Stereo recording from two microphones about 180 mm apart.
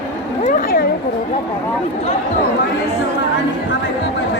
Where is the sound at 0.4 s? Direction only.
50° left (ahead or behind).